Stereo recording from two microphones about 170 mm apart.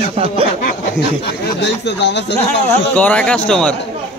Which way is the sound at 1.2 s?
90° left.